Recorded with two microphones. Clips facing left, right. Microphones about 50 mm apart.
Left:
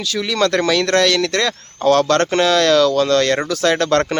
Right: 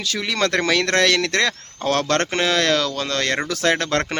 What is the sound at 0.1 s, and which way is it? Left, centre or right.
Speech, right.